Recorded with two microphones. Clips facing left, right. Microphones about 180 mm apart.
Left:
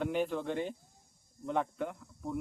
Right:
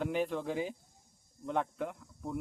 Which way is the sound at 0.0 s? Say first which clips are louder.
Left 1 dB; centre (ahead or behind).